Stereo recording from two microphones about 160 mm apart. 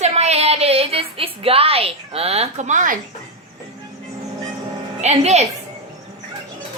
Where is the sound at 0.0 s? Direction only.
45° right (ahead or behind).